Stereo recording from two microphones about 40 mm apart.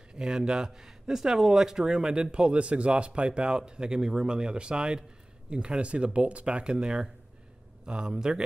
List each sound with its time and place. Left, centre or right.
0.1 s speech: right